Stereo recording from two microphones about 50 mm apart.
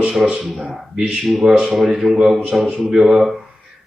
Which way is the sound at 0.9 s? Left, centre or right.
Centre.